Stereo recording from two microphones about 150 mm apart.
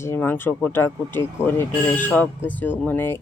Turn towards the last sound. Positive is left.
turn(degrees=15)  # may be behind; listen again after turning